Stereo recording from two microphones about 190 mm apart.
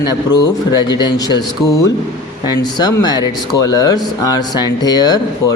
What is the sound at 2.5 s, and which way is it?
Speech, 20° left (ahead or behind).